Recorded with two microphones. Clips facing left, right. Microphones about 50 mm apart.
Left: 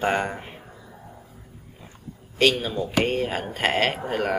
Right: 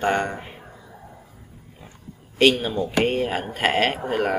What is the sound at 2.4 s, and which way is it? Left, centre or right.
Speech, centre.